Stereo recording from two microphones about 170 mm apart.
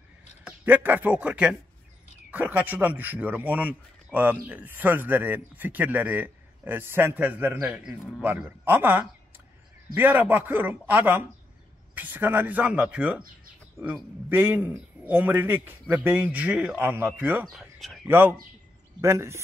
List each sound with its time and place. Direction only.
0.4 s a man's voice: 10° right (ahead or behind)
17.6 s a sound: centre (ahead or behind)
18.0 s a man's voice: 15° right (ahead or behind)